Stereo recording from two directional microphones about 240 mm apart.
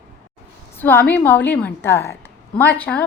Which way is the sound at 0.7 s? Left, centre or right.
Centre.